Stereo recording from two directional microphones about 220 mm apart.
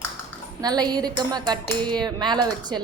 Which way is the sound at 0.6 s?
20° right (ahead or behind).